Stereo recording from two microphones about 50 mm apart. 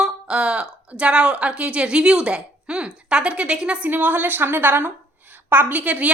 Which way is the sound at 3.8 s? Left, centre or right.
Right.